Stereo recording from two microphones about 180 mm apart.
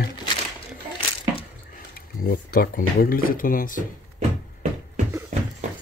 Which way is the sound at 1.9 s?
55° left (ahead or behind).